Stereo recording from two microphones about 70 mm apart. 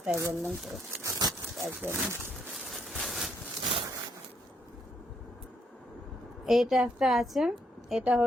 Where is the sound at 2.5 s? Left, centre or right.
Centre.